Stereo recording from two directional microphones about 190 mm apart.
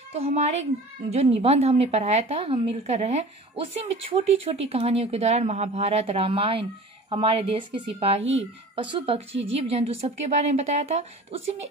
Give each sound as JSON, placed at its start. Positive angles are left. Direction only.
{"t": 0.1, "sound": "a woman's voice", "side_deg": -35}
{"t": 8.2, "sound": "speech", "side_deg": -90}
{"t": 8.7, "sound": "a woman's voice", "side_deg": -25}